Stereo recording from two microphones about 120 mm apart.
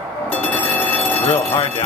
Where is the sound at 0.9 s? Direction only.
15° left (ahead or behind).